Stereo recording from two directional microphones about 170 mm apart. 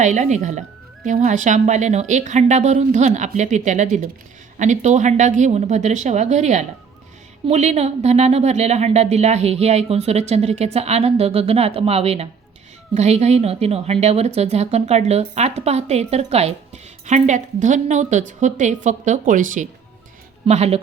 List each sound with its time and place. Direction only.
0.0 s a woman's voice: 45° right (ahead or behind)
20.5 s a woman's voice: 40° right (ahead or behind)